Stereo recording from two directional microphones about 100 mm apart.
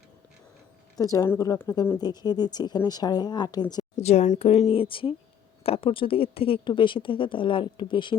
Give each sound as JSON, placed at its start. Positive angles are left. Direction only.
{"t": 0.9, "sound": "a woman's voice", "side_deg": 35}
{"t": 4.0, "sound": "a woman's voice", "side_deg": 90}